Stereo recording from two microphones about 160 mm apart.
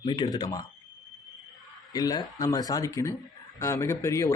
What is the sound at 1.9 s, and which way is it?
Speech, 25° left (ahead or behind).